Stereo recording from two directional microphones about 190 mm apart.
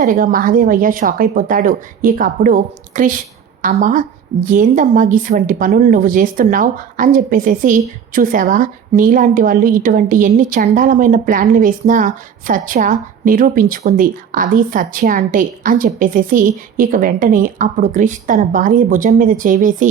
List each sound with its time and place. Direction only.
0.0 s a woman's voice: 45° right (ahead or behind)